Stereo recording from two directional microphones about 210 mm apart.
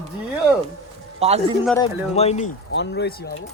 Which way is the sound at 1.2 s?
30° right (ahead or behind).